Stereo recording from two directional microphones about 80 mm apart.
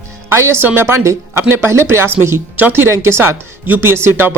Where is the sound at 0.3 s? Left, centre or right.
Right.